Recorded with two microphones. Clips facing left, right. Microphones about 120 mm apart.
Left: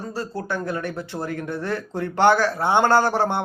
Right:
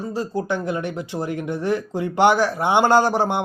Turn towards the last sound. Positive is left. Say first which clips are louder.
# right 2 dB
turn(degrees=-15)  # may be behind; listen again after turning